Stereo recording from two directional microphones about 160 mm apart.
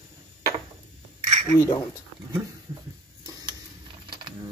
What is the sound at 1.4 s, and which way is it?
Speech, 25° left (ahead or behind).